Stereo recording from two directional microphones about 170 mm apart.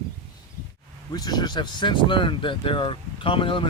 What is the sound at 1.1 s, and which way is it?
Speech, 25° left (ahead or behind).